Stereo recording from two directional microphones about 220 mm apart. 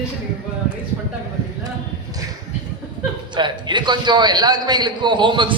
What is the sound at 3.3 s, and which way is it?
A man's voice, 20° right (ahead or behind).